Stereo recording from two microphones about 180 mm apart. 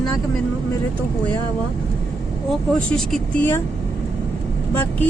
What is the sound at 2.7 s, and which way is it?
Speech, 5° left (ahead or behind).